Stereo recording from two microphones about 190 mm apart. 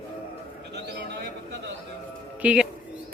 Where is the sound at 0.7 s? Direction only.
60° right (ahead or behind).